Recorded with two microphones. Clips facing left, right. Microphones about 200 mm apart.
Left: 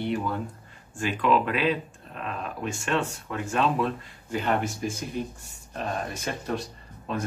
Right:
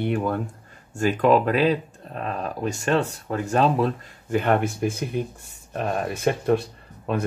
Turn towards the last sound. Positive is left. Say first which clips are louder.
# right 5 dB
turn(degrees=-60)  # may be behind; listen again after turning